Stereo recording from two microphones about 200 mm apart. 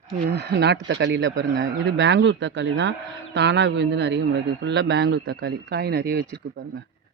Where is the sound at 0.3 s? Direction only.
55° right (ahead or behind).